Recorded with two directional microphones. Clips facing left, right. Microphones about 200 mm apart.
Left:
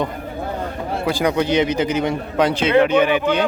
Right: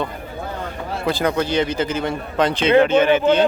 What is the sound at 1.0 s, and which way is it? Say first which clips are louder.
Speech: left 1 dB; 10° left (ahead or behind).